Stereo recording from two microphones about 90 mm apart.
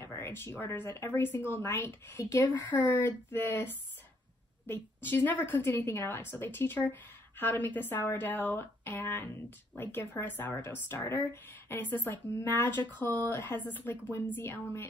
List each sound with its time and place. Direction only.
0.0 s a woman's voice: 25° left (ahead or behind)
2.7 s a woman's voice: 25° left (ahead or behind)